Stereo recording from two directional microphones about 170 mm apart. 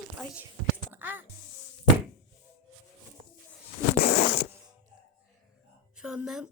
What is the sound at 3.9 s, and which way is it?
Zipper, 65° left (ahead or behind).